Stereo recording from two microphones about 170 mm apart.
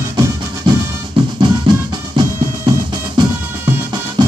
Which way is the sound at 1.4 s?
25° right (ahead or behind).